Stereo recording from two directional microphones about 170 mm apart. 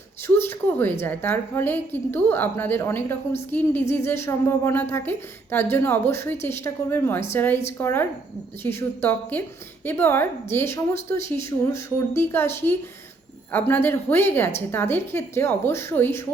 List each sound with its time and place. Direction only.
0.3 s speech: 15° left (ahead or behind)